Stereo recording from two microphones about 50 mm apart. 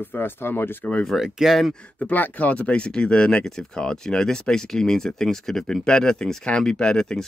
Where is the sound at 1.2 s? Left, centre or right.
Centre.